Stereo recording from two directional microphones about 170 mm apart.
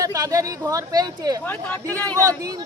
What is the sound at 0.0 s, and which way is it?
Speech, 20° right (ahead or behind).